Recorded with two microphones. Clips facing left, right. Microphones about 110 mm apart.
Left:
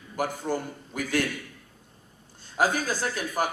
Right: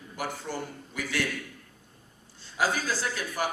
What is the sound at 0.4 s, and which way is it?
Speech, 45° left (ahead or behind).